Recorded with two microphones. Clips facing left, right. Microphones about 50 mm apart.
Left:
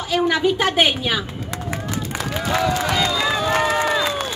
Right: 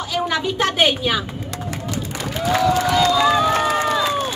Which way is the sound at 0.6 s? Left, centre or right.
Centre.